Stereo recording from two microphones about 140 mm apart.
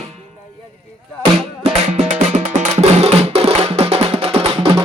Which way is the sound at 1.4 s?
50° right (ahead or behind).